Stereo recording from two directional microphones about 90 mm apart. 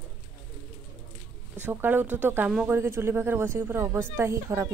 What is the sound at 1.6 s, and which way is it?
A woman's voice, 25° right (ahead or behind).